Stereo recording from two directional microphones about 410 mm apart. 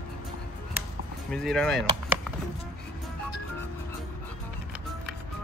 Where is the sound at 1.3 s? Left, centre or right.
Centre.